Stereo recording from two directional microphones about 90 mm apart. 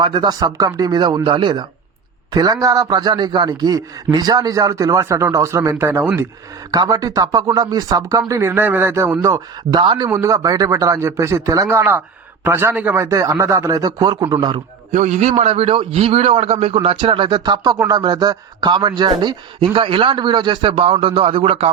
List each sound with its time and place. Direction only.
0.0 s speech: 55° right (ahead or behind); by 6.1 s 30° right (ahead or behind)
6.7 s speech: 45° right (ahead or behind)
8.3 s a man's voice: 25° right (ahead or behind)
9.7 s speech: 50° right (ahead or behind)
10.1 s a man's voice: 35° right (ahead or behind); by 13.1 s 20° right (ahead or behind)
13.1 s speech: 35° right (ahead or behind)
15.6 s a man's voice: 90° right